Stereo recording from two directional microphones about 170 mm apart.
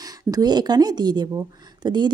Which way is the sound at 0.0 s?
20° right (ahead or behind).